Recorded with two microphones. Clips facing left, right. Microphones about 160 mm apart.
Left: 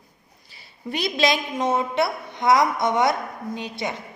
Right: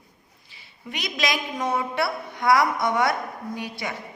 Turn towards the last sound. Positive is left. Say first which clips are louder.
# left 2 dB
turn(degrees=20)  # may be behind; listen again after turning